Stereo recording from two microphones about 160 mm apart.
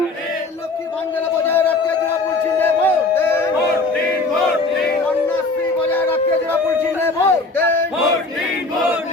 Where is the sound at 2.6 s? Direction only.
10° left (ahead or behind).